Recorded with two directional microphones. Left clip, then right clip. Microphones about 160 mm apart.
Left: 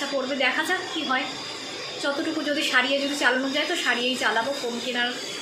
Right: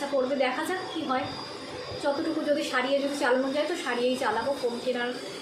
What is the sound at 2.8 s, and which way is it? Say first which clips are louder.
A woman's voice: left 4 dB; 5° left (ahead or behind).